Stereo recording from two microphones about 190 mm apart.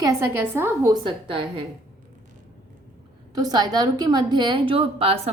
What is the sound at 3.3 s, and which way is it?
A woman's voice, 20° right (ahead or behind).